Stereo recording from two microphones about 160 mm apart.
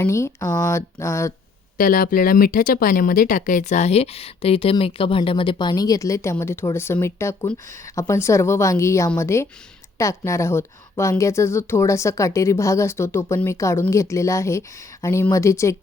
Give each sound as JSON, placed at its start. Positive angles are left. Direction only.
{"t": 0.0, "sound": "a woman's voice", "side_deg": 15}
{"t": 1.8, "sound": "a woman's voice", "side_deg": 60}